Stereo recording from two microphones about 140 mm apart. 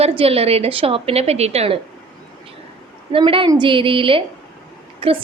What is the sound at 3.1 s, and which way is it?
A woman's voice, 40° right (ahead or behind).